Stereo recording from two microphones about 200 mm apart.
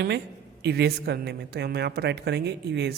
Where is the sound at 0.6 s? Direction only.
55° right (ahead or behind).